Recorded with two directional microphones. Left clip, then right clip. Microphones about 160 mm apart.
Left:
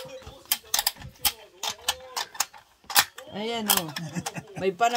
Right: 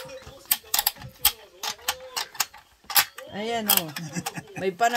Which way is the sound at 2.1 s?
35° left (ahead or behind).